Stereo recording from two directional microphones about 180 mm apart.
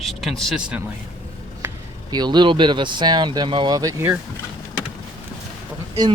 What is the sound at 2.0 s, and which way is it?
Speech, 25° right (ahead or behind).